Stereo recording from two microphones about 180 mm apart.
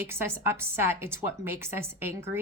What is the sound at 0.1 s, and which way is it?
A woman's voice, 15° right (ahead or behind).